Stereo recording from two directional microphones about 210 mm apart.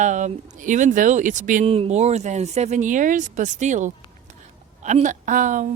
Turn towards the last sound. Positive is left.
turn(degrees=-40)  # may be behind; listen again after turning